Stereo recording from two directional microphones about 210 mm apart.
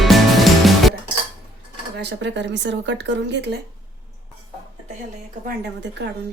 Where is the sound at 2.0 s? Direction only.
55° right (ahead or behind).